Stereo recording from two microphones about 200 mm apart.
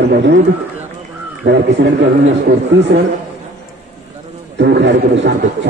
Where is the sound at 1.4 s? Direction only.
60° right (ahead or behind).